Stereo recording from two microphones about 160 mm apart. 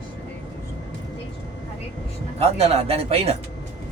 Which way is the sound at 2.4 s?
40° right (ahead or behind).